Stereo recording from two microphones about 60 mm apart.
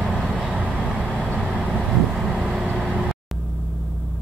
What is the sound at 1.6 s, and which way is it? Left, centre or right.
Vehicle, centre.